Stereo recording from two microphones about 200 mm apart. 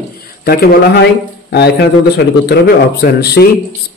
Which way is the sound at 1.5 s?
55° left (ahead or behind).